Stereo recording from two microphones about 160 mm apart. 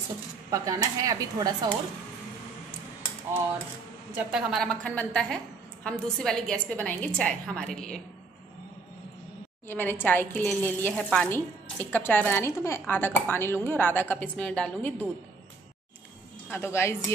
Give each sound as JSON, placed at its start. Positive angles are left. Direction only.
{"t": 0.5, "sound": "speech", "side_deg": -20}
{"t": 4.1, "sound": "a woman's voice", "side_deg": -10}
{"t": 9.7, "sound": "speech", "side_deg": 10}
{"t": 16.4, "sound": "speech", "side_deg": 15}